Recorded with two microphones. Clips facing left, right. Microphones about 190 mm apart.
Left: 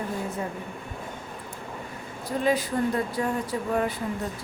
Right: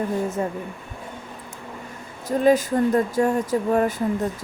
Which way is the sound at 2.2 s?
45° right (ahead or behind).